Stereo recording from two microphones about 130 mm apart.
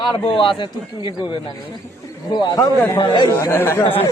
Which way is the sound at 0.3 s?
40° left (ahead or behind).